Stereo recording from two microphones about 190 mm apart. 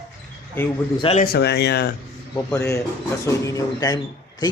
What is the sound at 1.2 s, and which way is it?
Speech, 55° left (ahead or behind).